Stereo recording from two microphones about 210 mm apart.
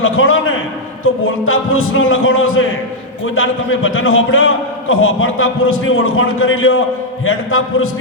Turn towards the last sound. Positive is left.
turn(degrees=75)  # may be behind; listen again after turning